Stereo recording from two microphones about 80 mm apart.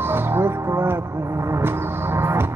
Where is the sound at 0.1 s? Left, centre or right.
Right.